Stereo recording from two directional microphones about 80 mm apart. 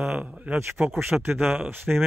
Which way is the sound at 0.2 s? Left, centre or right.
Centre.